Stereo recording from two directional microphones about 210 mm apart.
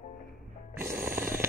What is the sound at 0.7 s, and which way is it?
Music, 10° right (ahead or behind).